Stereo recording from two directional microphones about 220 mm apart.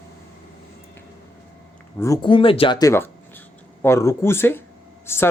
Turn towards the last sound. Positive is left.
turn(degrees=10)  # may be behind; listen again after turning